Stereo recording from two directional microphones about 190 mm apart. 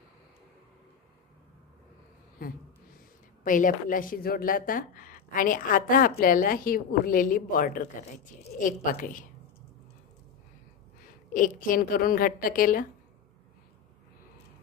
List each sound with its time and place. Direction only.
3.4 s a woman's voice: 45° left (ahead or behind)
11.3 s a woman's voice: 45° left (ahead or behind)